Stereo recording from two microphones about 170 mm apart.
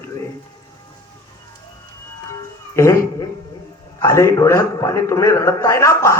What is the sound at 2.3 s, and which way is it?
A man's voice, 15° left (ahead or behind).